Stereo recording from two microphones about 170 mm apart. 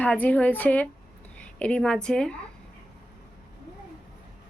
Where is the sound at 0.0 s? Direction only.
10° left (ahead or behind).